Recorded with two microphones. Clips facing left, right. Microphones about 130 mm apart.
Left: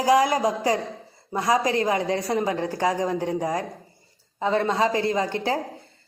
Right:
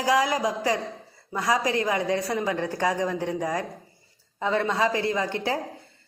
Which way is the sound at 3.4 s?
25° left (ahead or behind).